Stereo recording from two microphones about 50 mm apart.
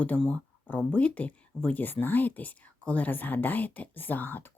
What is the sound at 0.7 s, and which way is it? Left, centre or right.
Speech, left.